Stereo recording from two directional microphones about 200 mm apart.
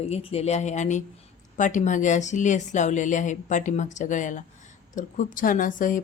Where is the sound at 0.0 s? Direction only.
30° left (ahead or behind).